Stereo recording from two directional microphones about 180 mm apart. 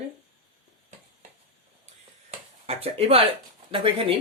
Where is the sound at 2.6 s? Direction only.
35° right (ahead or behind).